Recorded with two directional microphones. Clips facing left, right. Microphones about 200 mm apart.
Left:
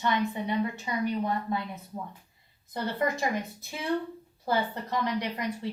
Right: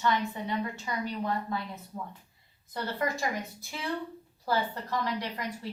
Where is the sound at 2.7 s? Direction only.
20° left (ahead or behind).